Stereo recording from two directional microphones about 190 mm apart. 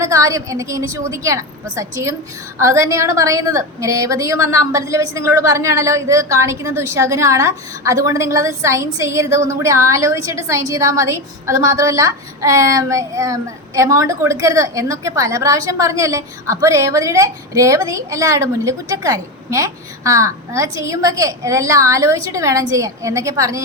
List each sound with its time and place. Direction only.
0.0 s a woman's voice: 15° right (ahead or behind)